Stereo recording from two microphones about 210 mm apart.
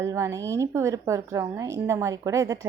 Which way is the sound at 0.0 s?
15° right (ahead or behind).